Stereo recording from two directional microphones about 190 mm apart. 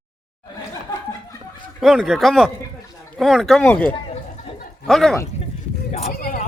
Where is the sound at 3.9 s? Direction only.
30° left (ahead or behind).